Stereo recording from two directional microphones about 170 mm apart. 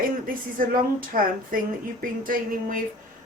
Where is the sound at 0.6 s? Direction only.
55° right (ahead or behind).